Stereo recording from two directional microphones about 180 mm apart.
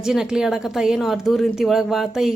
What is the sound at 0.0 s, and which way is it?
Speech, 5° right (ahead or behind).